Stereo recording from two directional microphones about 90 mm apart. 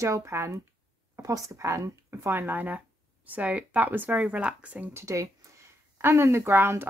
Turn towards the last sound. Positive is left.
turn(degrees=-25)  # may be behind; listen again after turning